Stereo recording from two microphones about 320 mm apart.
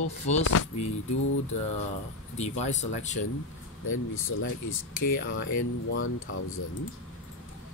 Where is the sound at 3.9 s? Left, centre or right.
Left.